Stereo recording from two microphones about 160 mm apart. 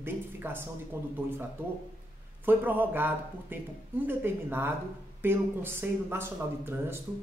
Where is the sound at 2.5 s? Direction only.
10° right (ahead or behind).